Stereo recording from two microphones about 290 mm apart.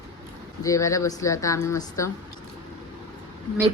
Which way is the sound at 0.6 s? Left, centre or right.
Centre.